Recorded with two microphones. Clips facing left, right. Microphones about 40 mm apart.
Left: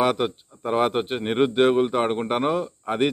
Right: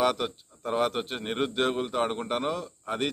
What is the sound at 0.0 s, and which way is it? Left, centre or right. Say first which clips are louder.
Speech: left 4 dB; left.